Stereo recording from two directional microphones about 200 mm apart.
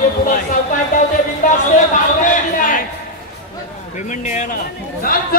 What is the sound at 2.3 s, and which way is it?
Speech, 40° left (ahead or behind).